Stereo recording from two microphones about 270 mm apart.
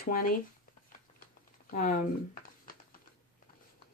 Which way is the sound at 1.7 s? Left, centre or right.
Left.